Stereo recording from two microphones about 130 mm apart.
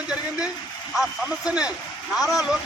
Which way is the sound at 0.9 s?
5° right (ahead or behind).